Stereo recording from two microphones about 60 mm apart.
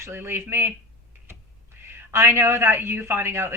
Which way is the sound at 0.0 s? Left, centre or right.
Right.